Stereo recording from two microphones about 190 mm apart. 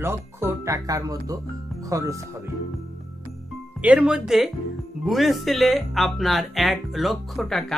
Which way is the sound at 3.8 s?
5° right (ahead or behind).